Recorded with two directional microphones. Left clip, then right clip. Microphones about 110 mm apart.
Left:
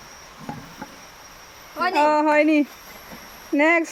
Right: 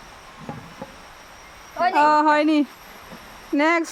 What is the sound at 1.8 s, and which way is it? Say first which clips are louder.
Speech: right 2 dB; 20° right (ahead or behind).